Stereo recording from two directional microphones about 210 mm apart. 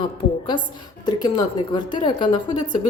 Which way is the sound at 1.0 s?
20° left (ahead or behind).